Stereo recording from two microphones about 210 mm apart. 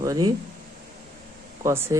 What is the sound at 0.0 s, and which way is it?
Speech, 15° right (ahead or behind).